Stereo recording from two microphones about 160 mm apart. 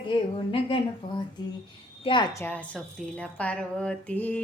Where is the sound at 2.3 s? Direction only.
10° left (ahead or behind).